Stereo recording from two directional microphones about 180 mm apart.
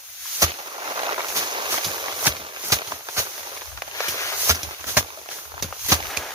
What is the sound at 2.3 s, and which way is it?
Horse, 25° right (ahead or behind).